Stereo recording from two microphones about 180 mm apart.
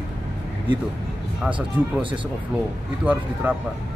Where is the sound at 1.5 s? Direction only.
25° right (ahead or behind).